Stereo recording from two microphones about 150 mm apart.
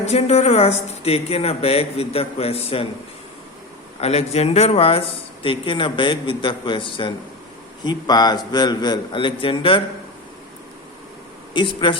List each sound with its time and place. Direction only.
0.0 s speech: 45° left (ahead or behind)
4.0 s a man's voice: 45° left (ahead or behind)
11.5 s speech: 35° left (ahead or behind)